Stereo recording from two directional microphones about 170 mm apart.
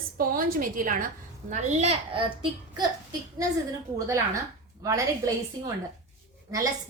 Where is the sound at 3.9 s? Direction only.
20° right (ahead or behind).